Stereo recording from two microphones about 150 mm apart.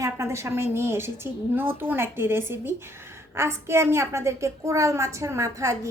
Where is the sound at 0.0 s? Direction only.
20° right (ahead or behind).